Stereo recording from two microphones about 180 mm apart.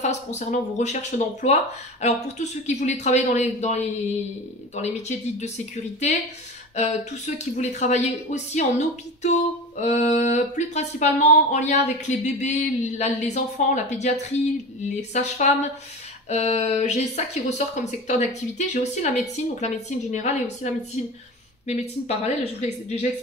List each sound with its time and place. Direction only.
0.0 s speech: 40° left (ahead or behind)
4.8 s speech: 40° left (ahead or behind)
6.7 s speech: 40° left (ahead or behind)